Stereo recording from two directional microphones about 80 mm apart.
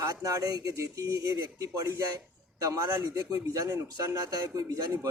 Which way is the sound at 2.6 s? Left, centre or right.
Right.